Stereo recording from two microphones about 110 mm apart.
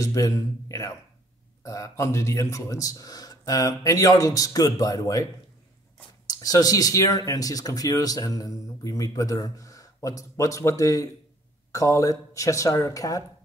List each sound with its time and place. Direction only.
0.0 s speech: 30° left (ahead or behind)